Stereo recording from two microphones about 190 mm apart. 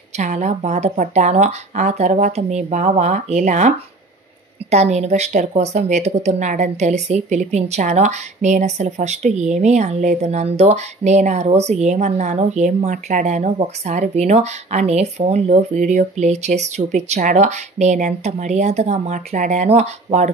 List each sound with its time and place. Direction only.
0.2 s speech: 40° right (ahead or behind)